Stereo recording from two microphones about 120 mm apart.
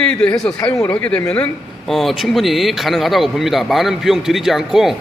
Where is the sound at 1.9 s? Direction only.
Centre (ahead or behind).